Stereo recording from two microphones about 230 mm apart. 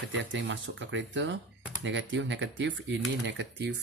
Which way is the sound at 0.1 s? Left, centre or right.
Right.